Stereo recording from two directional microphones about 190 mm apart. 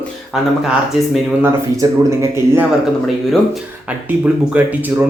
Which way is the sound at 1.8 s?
15° right (ahead or behind).